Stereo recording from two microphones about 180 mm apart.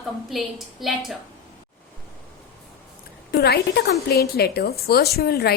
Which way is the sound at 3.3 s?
65° left (ahead or behind).